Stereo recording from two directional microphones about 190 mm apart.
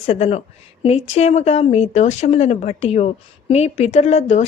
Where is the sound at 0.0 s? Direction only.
35° left (ahead or behind).